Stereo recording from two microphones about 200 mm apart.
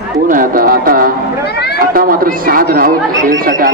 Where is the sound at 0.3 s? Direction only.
45° right (ahead or behind).